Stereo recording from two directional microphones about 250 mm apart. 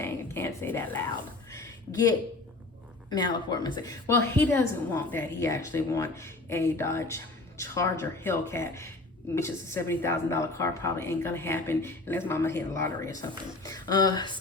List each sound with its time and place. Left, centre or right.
0.0 s whispering: centre
1.5 s a sound: centre
3.1 s a woman's voice: centre